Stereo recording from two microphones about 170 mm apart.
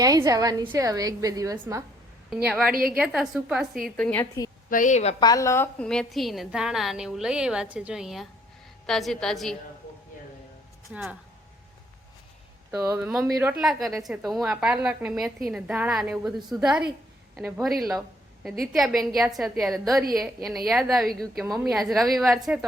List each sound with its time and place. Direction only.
0.0 s a woman's voice: 20° right (ahead or behind)
2.3 s a woman's voice: 5° right (ahead or behind)
4.7 s a woman's voice: 50° left (ahead or behind)
5.2 s a woman's voice: 20° left (ahead or behind)
5.8 s a woman's voice: 5° left (ahead or behind)
10.9 s speech: 5° right (ahead or behind)
12.7 s speech: 15° right (ahead or behind)
13.0 s a woman's voice: 5° right (ahead or behind)